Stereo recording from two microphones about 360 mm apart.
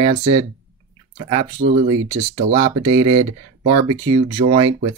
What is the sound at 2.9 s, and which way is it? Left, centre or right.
Speech, centre.